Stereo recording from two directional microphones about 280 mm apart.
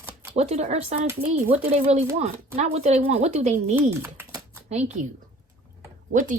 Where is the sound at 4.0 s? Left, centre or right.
Centre.